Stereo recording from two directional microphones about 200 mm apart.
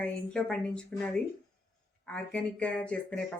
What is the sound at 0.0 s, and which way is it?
Speech, 5° left (ahead or behind).